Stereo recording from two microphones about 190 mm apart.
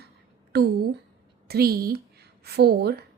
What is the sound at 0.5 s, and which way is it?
A woman's voice, 55° right (ahead or behind).